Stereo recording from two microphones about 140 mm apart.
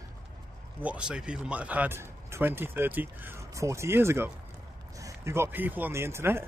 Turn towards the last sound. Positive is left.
turn(degrees=-20)  # may be behind; listen again after turning